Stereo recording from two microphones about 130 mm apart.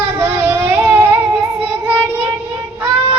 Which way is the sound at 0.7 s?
15° right (ahead or behind).